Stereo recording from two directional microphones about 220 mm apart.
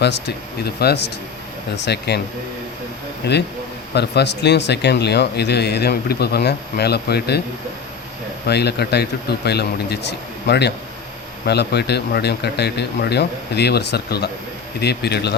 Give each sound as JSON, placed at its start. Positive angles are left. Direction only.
{"t": 0.0, "sound": "speech", "side_deg": 50}
{"t": 3.2, "sound": "speech", "side_deg": 50}
{"t": 8.4, "sound": "speech", "side_deg": 50}